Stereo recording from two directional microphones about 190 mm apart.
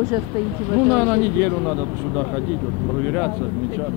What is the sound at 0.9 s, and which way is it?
Speech, 15° left (ahead or behind).